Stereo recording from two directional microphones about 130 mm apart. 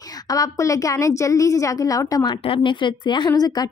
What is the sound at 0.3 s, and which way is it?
Speech, 25° left (ahead or behind).